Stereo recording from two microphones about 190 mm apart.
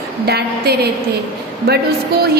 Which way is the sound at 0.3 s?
55° right (ahead or behind).